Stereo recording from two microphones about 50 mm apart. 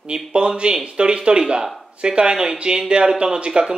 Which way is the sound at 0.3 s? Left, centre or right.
Centre.